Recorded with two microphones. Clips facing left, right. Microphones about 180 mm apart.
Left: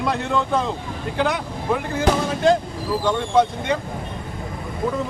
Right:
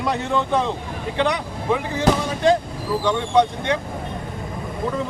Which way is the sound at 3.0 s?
5° left (ahead or behind).